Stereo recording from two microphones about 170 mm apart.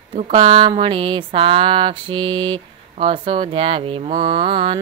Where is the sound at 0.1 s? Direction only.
35° right (ahead or behind).